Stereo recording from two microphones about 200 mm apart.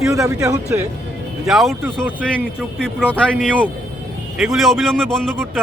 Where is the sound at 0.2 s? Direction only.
15° right (ahead or behind).